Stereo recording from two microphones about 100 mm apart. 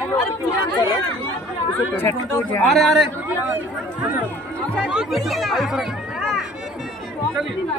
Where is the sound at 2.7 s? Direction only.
Centre (ahead or behind).